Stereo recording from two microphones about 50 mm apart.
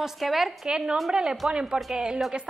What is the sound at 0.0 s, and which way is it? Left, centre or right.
Speech, centre.